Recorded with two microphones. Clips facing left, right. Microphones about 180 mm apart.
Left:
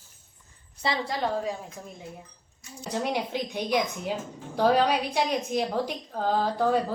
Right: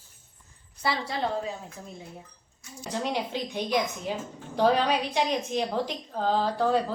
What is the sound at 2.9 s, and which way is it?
Speech, 10° left (ahead or behind).